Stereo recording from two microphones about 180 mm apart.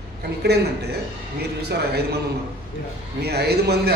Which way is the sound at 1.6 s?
65° right (ahead or behind).